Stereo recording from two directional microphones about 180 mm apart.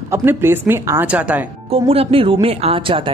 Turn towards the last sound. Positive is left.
turn(degrees=-30)  # may be behind; listen again after turning